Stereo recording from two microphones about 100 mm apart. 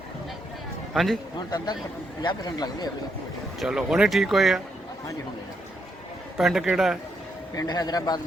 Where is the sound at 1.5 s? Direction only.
45° left (ahead or behind).